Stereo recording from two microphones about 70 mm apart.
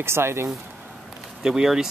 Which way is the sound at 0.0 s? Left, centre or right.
Right.